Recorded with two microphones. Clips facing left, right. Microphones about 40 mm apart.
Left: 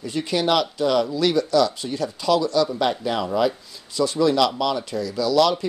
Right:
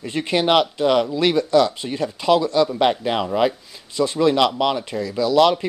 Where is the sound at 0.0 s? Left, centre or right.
Right.